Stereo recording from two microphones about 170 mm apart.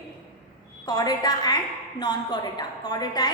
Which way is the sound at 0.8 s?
25° left (ahead or behind).